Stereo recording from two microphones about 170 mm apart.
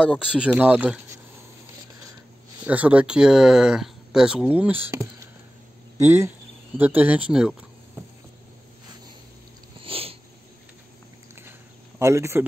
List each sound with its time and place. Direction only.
0.1 s speech: 5° right (ahead or behind)
2.6 s speech: 10° right (ahead or behind)
9.8 s cat: 35° right (ahead or behind)
12.0 s speech: 15° right (ahead or behind)